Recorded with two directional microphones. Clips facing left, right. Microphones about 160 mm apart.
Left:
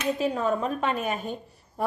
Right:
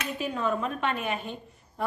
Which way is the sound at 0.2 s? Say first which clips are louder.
Left 3 dB; 40° left (ahead or behind).